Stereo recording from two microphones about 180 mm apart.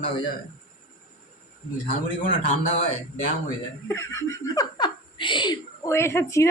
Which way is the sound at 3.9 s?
15° left (ahead or behind).